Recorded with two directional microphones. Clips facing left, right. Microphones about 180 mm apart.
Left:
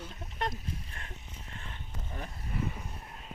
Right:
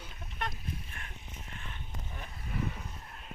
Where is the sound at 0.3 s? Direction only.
30° left (ahead or behind).